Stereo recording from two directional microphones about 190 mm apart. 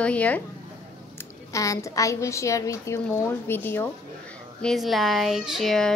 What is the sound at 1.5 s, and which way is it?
A woman's voice, 15° left (ahead or behind).